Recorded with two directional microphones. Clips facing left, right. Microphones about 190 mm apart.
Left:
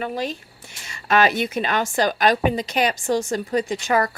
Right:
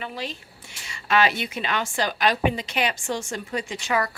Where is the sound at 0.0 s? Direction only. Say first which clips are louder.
Left 7 dB; 45° left (ahead or behind).